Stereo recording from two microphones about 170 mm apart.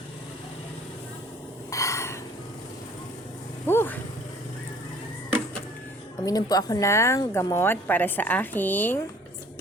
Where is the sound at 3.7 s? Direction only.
10° left (ahead or behind).